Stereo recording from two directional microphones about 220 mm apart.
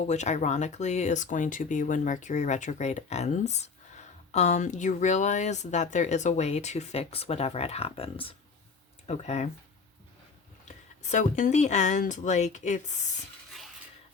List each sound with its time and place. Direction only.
0.1 s speech: 30° left (ahead or behind)
10.7 s speech: 35° left (ahead or behind)